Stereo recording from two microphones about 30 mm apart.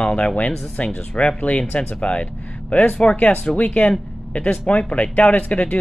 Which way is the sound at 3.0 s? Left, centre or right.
Left.